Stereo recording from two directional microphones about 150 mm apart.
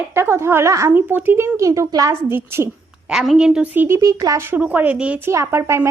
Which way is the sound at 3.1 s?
5° right (ahead or behind).